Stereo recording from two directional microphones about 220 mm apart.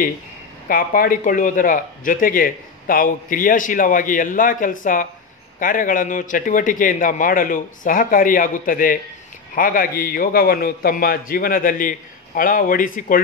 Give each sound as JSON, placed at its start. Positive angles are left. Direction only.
{"t": 0.7, "sound": "speech", "side_deg": 40}